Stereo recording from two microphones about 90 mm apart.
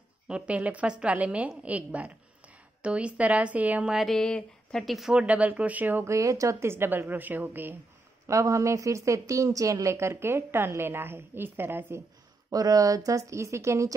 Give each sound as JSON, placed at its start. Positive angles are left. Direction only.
{"t": 0.3, "sound": "a woman's voice", "side_deg": -15}
{"t": 3.9, "sound": "speech", "side_deg": 0}
{"t": 5.2, "sound": "a woman's voice", "side_deg": -15}
{"t": 6.0, "sound": "a woman's voice", "side_deg": -35}
{"t": 8.3, "sound": "speech", "side_deg": -35}
{"t": 12.4, "sound": "speech", "side_deg": -45}